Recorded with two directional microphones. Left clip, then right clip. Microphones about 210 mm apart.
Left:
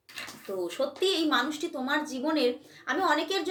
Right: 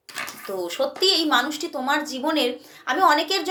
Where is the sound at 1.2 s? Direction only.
5° left (ahead or behind).